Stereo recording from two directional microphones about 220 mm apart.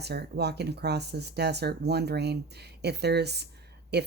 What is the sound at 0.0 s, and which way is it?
Speech, 50° right (ahead or behind).